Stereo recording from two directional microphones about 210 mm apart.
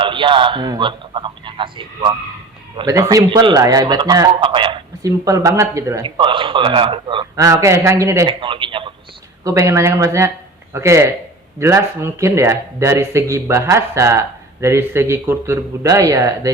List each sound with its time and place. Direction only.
0.0 s a man's voice: 25° right (ahead or behind)